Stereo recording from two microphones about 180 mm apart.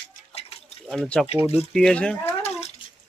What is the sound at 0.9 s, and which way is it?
Speech, 5° left (ahead or behind).